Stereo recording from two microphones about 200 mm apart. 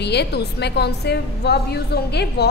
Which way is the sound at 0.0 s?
55° left (ahead or behind).